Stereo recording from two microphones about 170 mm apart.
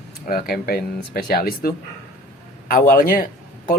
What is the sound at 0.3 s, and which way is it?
A man's voice, 65° left (ahead or behind).